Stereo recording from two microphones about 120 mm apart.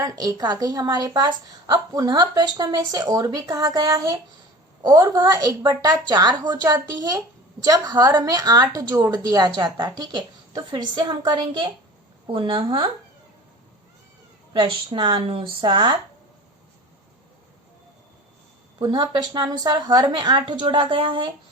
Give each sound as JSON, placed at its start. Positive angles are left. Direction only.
{"t": 0.0, "sound": "a woman's voice", "side_deg": -30}
{"t": 14.5, "sound": "a woman's voice", "side_deg": -45}
{"t": 18.8, "sound": "a woman's voice", "side_deg": -40}